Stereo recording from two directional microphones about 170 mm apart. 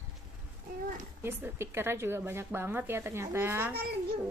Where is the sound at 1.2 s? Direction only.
15° right (ahead or behind).